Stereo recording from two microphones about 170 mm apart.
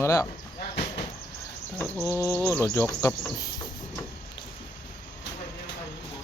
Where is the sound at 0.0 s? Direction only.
20° left (ahead or behind).